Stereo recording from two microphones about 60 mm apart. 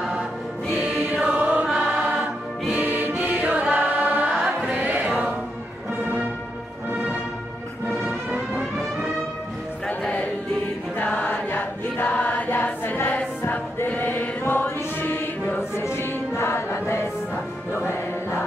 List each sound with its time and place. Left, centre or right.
0.9 s music: right
2.7 s music: right
9.8 s music: left
11.1 s choir: left
13.8 s chant: left
15.8 s choir: left